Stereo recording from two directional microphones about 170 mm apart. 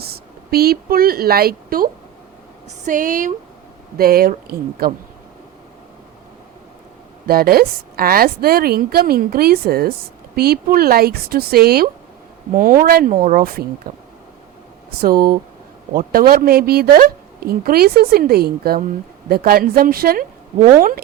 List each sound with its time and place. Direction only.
0.0 s a woman's voice: 65° right (ahead or behind)
2.6 s speech: 50° right (ahead or behind)
3.9 s a woman's voice: 60° right (ahead or behind)
7.3 s a woman's voice: 60° right (ahead or behind)
15.0 s a woman's voice: 60° right (ahead or behind)